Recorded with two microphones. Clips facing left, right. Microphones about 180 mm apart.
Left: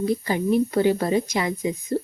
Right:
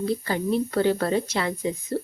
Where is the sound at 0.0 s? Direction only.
15° left (ahead or behind).